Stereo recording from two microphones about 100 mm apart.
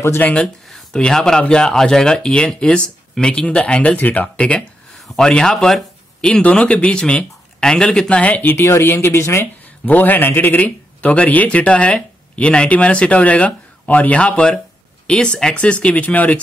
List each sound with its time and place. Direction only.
0.0 s speech: 25° left (ahead or behind)
0.3 s speech: 5° left (ahead or behind)